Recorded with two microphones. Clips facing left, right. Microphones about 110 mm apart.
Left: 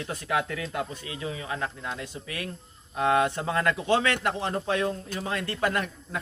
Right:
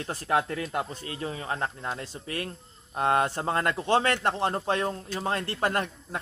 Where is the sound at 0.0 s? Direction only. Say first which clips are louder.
Right 2 dB; 35° right (ahead or behind).